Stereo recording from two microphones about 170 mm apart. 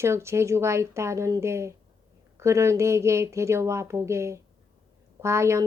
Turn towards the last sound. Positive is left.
turn(degrees=-15)  # may be behind; listen again after turning